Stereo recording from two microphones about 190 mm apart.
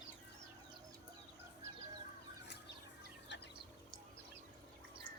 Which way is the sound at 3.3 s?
70° left (ahead or behind).